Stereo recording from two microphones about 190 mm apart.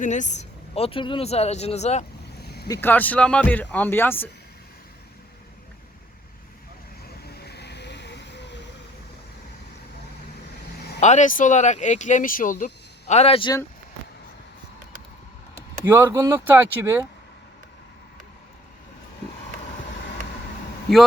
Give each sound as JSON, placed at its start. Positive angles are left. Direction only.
{"t": 0.0, "sound": "speech", "side_deg": 40}
{"t": 2.4, "sound": "vehicle", "side_deg": 55}
{"t": 2.6, "sound": "speech", "side_deg": 15}
{"t": 7.3, "sound": "vehicle", "side_deg": 60}
{"t": 10.8, "sound": "vehicle", "side_deg": 60}
{"t": 11.0, "sound": "speech", "side_deg": 40}
{"t": 15.8, "sound": "speech", "side_deg": -10}